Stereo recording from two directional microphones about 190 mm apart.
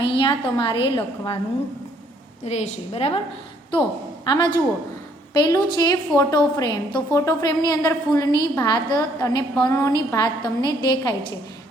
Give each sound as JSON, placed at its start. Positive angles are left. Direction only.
{"t": 0.0, "sound": "a woman's voice", "side_deg": 25}
{"t": 2.4, "sound": "a woman's voice", "side_deg": 35}
{"t": 4.3, "sound": "a woman's voice", "side_deg": 20}